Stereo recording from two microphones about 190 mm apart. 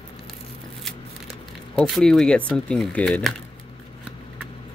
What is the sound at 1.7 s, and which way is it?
Speech, centre (ahead or behind).